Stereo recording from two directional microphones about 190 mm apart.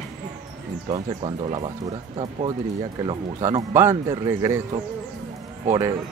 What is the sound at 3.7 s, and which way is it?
Speech, 15° right (ahead or behind).